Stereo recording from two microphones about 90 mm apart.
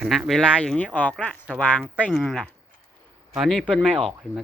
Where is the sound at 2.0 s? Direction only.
10° left (ahead or behind).